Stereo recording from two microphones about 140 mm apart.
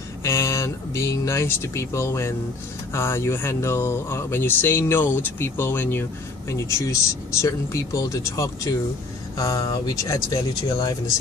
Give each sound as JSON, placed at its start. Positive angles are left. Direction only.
{"t": 0.2, "sound": "speech", "side_deg": 20}